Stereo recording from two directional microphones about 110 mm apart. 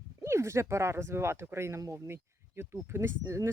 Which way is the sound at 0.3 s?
25° right (ahead or behind).